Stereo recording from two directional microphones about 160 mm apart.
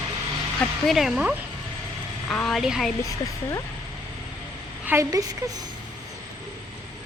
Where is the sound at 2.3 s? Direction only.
Centre (ahead or behind).